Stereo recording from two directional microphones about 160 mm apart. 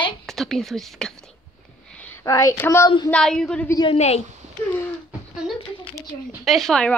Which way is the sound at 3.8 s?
40° left (ahead or behind).